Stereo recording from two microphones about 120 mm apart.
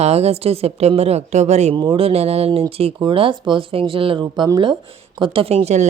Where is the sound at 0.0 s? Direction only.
60° right (ahead or behind).